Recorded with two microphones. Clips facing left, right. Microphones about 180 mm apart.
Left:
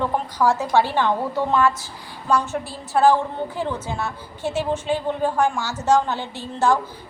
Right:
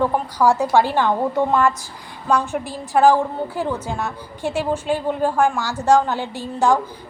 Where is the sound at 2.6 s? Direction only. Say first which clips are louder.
Right 3 dB; 15° right (ahead or behind).